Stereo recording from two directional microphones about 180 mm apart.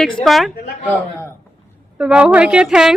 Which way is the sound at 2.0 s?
5° right (ahead or behind).